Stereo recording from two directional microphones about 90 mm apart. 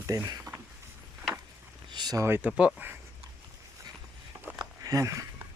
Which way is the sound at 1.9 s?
55° right (ahead or behind).